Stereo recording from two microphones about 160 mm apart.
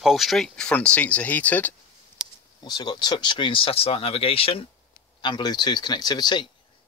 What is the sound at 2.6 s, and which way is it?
Speech, 25° left (ahead or behind).